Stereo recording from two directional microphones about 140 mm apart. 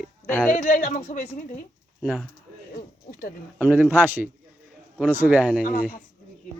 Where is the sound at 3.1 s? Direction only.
90° left.